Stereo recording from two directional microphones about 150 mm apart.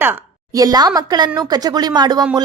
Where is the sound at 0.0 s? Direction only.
20° right (ahead or behind).